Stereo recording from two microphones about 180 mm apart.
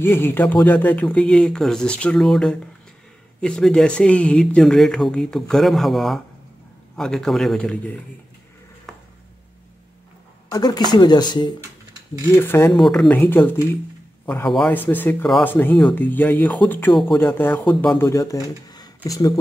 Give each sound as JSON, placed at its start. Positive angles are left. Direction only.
{"t": 0.0, "sound": "speech", "side_deg": 10}
{"t": 10.5, "sound": "speech", "side_deg": 20}
{"t": 12.3, "sound": "speech", "side_deg": 15}
{"t": 12.7, "sound": "speech", "side_deg": 0}